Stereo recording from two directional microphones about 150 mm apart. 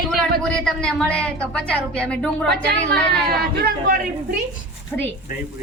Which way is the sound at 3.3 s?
85° right.